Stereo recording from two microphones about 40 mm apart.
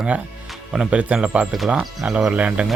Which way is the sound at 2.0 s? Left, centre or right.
Centre.